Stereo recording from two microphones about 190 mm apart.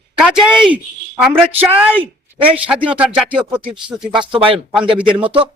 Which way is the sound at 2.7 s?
5° right (ahead or behind).